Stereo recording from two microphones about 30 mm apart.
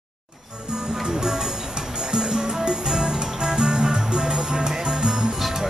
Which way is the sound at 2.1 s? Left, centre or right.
Right.